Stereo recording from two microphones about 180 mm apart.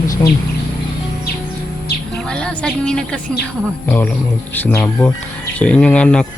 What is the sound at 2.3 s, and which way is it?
A woman's voice, 5° left (ahead or behind).